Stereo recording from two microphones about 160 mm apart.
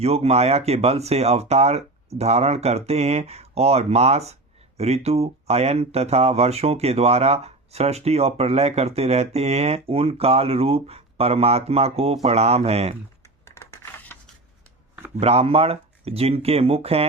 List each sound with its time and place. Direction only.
0.0 s speech: 40° right (ahead or behind)
13.4 s a sound: 15° left (ahead or behind)
15.1 s speech: 40° right (ahead or behind)